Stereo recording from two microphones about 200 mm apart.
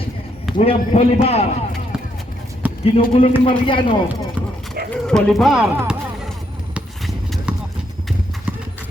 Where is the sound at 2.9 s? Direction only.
25° left (ahead or behind).